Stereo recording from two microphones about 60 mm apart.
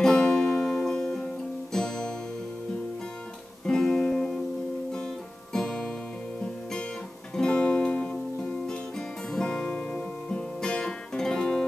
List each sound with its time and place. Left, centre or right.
0.0 s music: centre
3.6 s guitar: centre
5.5 s music: centre
7.3 s music: centre
9.3 s music: centre